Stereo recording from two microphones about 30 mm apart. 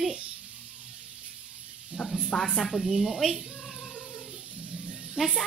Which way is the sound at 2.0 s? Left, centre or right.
Left.